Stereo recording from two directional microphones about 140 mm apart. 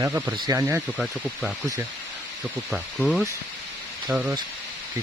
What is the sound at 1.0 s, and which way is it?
Speech, centre (ahead or behind).